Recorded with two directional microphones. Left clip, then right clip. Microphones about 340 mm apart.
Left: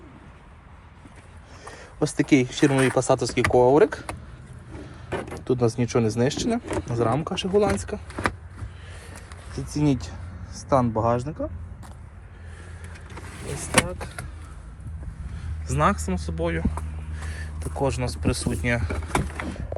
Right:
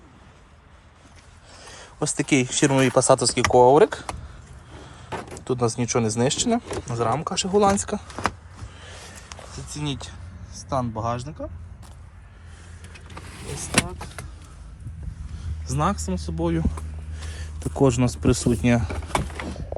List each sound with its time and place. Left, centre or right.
1.6 s speech: centre
5.5 s speech: centre
8.8 s a sound: centre
9.7 s speech: centre
13.1 s vehicle: centre
15.6 s speech: centre
17.8 s speech: right
18.9 s vehicle: centre